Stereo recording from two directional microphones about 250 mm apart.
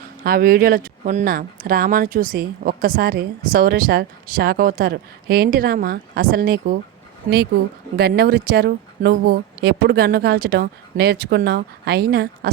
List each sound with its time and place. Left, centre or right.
0.3 s speech: right
7.9 s speech: right